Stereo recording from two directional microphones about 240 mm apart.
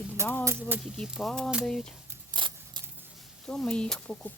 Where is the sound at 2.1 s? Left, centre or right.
Centre.